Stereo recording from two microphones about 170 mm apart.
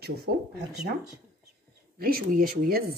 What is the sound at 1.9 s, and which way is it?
Speech, 60° right (ahead or behind).